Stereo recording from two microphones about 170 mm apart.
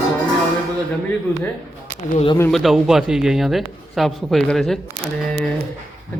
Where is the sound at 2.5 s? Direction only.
Centre (ahead or behind).